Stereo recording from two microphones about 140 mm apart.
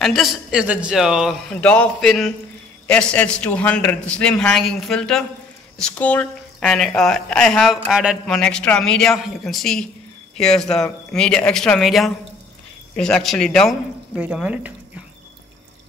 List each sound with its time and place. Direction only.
0.0 s speech: centre (ahead or behind)
1.5 s a man's voice: 10° left (ahead or behind); by 14.7 s 10° right (ahead or behind)